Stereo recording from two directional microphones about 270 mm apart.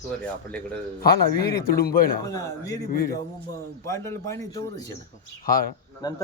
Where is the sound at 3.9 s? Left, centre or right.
Centre.